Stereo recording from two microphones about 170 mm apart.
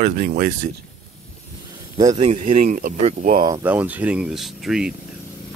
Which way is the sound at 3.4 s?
20° right (ahead or behind).